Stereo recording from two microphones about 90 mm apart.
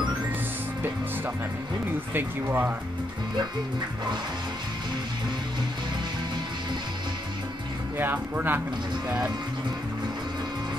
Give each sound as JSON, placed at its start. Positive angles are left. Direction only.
{"t": 2.1, "sound": "speech", "side_deg": -25}
{"t": 8.0, "sound": "speech", "side_deg": -20}